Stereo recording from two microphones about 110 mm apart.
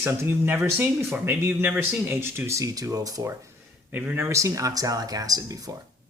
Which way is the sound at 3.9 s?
15° right (ahead or behind).